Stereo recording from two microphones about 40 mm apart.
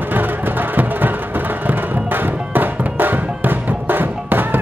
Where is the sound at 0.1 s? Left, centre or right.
Right.